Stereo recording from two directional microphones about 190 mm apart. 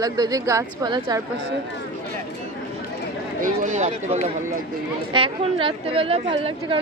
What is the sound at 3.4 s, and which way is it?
Speech, 40° right (ahead or behind).